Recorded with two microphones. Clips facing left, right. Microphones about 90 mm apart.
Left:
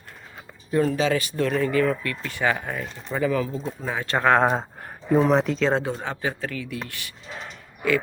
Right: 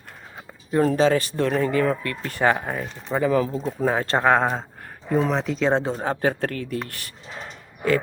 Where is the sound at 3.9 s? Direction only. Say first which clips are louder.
Right 8 dB; 40° right (ahead or behind).